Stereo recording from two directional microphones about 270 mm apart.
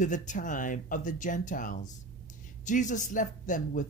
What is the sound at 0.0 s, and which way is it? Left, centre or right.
Speech, left.